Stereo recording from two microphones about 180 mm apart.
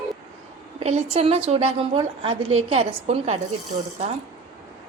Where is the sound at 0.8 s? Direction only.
35° right (ahead or behind).